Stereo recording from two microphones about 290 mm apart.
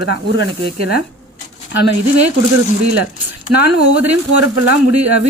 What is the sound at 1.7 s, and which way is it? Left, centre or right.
Speech, right.